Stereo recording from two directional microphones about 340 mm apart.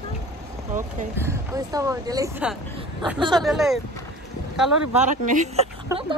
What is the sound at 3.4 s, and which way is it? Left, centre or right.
Speech, centre.